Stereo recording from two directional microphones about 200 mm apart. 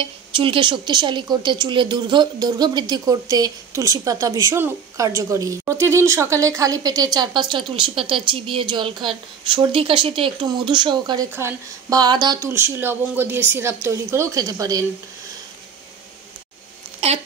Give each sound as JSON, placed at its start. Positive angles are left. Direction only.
{"t": 0.0, "sound": "speech", "side_deg": -25}